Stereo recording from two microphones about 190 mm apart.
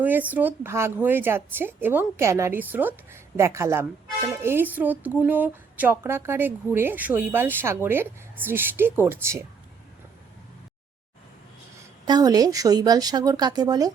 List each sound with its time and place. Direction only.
0.0 s speech: 10° right (ahead or behind)
12.0 s a woman's voice: 20° right (ahead or behind)